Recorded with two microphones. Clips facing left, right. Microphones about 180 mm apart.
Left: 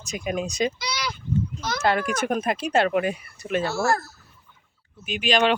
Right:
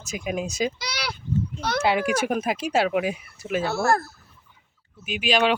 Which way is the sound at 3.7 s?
60° right (ahead or behind).